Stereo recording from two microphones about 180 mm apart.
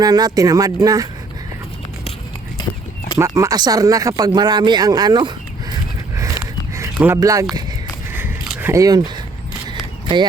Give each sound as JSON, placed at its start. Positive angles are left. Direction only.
{"t": 0.0, "sound": "speech", "side_deg": -20}
{"t": 3.2, "sound": "speech", "side_deg": -15}
{"t": 6.1, "sound": "a sound", "side_deg": -15}
{"t": 6.7, "sound": "speech", "side_deg": -15}
{"t": 8.1, "sound": "a sound", "side_deg": -10}
{"t": 9.6, "sound": "single-lens reflex camera", "side_deg": -25}